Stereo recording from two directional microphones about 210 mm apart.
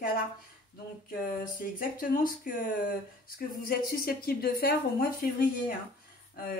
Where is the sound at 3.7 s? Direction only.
45° left (ahead or behind).